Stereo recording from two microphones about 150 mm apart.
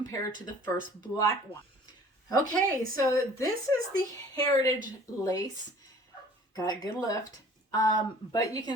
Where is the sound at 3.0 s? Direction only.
20° left (ahead or behind).